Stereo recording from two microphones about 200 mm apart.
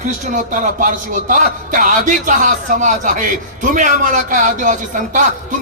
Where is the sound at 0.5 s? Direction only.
40° right (ahead or behind).